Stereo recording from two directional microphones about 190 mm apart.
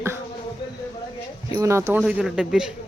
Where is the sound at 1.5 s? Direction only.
15° right (ahead or behind).